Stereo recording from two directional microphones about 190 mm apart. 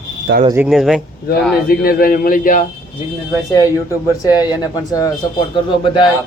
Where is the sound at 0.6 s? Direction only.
Centre (ahead or behind).